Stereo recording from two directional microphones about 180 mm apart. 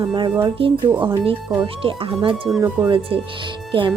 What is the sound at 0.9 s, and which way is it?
Speech, 10° right (ahead or behind).